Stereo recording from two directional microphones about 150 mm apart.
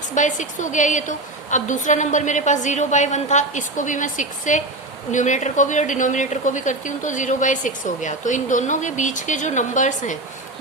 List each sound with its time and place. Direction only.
0.1 s speech: 55° left (ahead or behind)